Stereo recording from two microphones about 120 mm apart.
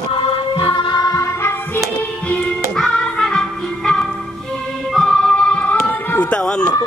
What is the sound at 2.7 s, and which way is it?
Music, 5° left (ahead or behind).